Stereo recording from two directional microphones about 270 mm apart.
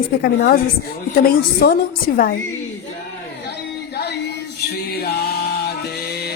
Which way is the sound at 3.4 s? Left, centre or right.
Left.